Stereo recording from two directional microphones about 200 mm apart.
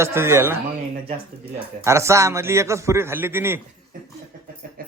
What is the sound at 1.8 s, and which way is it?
A man's voice, 15° right (ahead or behind).